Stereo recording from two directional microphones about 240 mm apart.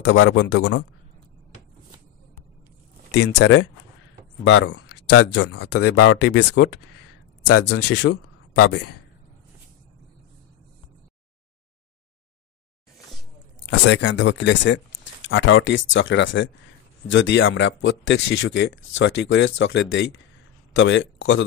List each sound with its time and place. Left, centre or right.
0.0 s speech: left
3.2 s speech: left
5.8 s speech: left
8.5 s speech: left
13.7 s a man's voice: left